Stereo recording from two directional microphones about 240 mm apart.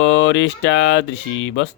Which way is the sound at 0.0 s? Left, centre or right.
Left.